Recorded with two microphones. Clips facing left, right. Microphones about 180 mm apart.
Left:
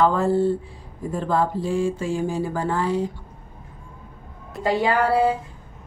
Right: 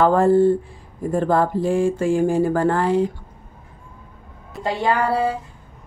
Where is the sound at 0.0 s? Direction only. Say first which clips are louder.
Right 4 dB; 50° right (ahead or behind).